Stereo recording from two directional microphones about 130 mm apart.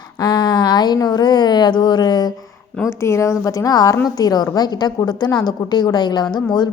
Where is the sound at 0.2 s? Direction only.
35° left (ahead or behind).